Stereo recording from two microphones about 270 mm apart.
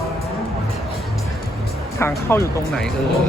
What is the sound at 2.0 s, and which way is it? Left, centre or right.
Speech, centre.